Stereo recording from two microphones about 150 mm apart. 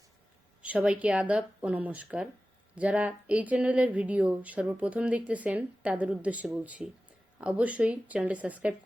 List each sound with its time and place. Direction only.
0.6 s speech: 10° right (ahead or behind)